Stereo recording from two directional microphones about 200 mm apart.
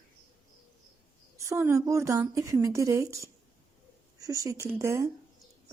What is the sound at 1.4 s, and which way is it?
A woman's voice, 15° right (ahead or behind).